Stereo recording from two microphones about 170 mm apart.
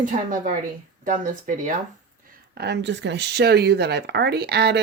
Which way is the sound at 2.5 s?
80° right.